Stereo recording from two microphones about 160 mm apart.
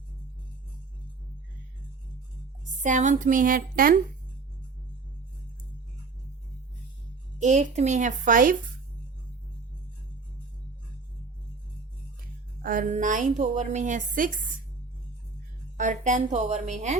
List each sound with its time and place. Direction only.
2.6 s a woman's voice: 50° right (ahead or behind)
7.3 s a woman's voice: 50° right (ahead or behind)
12.6 s a woman's voice: 55° right (ahead or behind)
15.8 s a woman's voice: 50° right (ahead or behind)